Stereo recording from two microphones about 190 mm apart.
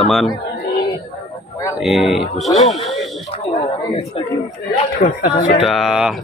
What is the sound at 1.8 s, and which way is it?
Speech, centre (ahead or behind).